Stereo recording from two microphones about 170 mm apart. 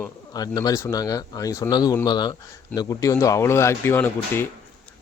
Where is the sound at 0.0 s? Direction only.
20° left (ahead or behind).